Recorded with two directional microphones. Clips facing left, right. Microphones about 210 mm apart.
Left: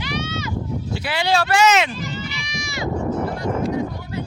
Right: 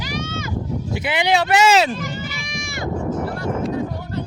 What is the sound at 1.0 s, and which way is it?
Speech, 20° right (ahead or behind).